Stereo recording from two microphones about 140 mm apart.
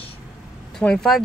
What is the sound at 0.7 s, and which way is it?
Speech, 5° left (ahead or behind).